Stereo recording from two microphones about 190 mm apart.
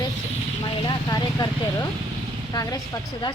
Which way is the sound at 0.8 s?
20° left (ahead or behind).